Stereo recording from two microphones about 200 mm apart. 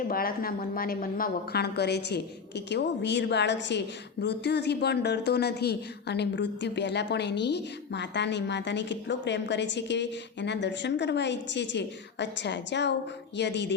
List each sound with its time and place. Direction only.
0.1 s a woman's voice: 45° left (ahead or behind)